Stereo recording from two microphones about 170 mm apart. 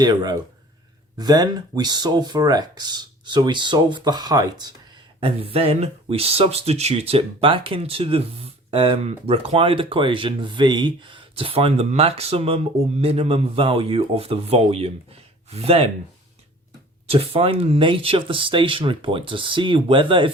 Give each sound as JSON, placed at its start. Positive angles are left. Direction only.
{"t": 0.0, "sound": "speech", "side_deg": -25}
{"t": 5.2, "sound": "speech", "side_deg": -35}
{"t": 17.1, "sound": "speech", "side_deg": -35}